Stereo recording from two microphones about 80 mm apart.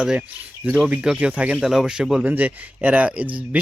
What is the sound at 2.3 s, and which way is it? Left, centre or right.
Speech, centre.